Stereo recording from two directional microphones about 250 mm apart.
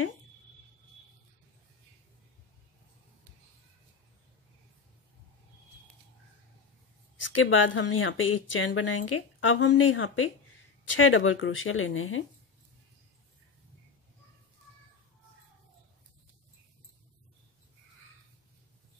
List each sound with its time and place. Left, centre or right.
7.3 s speech: left